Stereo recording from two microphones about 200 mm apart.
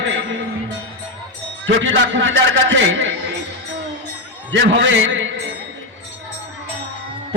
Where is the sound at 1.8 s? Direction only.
70° right (ahead or behind).